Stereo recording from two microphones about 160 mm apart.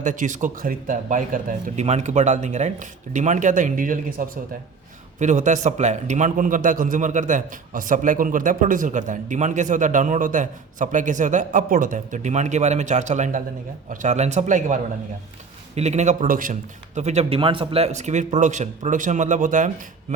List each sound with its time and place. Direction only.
0.0 s a man's voice: 50° right (ahead or behind)